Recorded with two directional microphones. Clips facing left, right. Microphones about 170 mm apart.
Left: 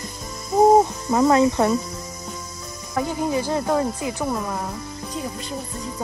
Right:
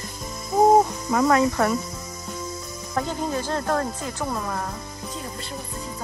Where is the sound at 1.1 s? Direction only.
25° left (ahead or behind).